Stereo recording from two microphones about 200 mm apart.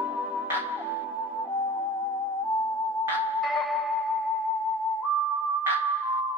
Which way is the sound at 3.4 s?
Centre (ahead or behind).